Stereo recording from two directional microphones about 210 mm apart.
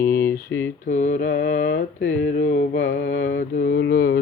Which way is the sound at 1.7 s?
60° left (ahead or behind).